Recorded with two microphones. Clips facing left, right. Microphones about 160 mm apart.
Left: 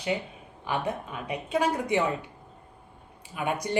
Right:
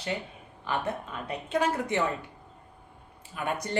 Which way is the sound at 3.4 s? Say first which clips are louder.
Left 2 dB; 15° left (ahead or behind).